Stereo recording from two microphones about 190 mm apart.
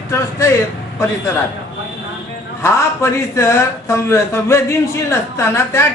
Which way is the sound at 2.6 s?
15° left (ahead or behind).